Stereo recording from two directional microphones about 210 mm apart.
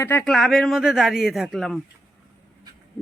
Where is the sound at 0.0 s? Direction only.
10° left (ahead or behind).